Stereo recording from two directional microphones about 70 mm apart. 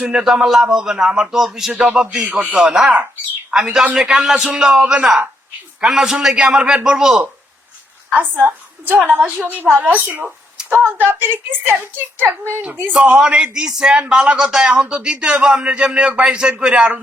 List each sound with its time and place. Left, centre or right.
0.0 s a man's voice: centre
8.1 s a woman's voice: right
13.1 s a man's voice: centre